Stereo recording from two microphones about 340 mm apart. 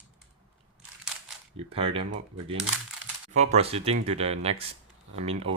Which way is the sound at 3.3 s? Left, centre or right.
Centre.